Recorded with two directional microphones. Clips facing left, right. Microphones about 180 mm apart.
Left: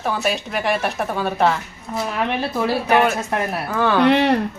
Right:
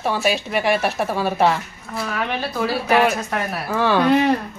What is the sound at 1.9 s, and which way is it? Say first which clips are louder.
Speech: left 2 dB; 20° left (ahead or behind).